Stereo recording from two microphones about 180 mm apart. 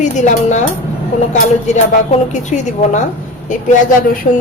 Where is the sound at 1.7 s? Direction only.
40° left (ahead or behind).